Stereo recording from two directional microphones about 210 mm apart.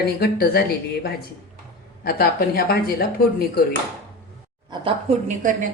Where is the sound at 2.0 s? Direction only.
45° left (ahead or behind).